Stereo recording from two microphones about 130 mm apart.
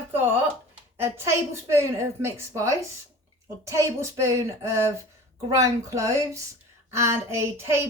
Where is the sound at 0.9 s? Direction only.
20° right (ahead or behind).